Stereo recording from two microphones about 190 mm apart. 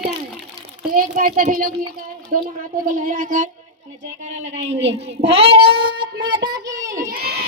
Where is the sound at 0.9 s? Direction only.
50° right (ahead or behind); by 5.1 s 35° right (ahead or behind).